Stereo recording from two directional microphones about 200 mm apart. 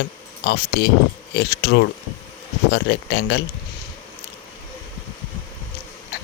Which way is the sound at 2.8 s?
60° left (ahead or behind).